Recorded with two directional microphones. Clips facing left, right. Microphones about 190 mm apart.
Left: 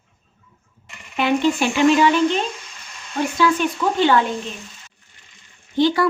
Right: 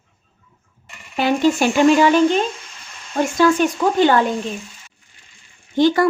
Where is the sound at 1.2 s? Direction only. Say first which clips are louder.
Right 2 dB; 40° right (ahead or behind).